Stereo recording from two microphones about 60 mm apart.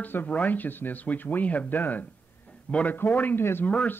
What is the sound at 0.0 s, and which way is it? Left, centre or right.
Speech, left.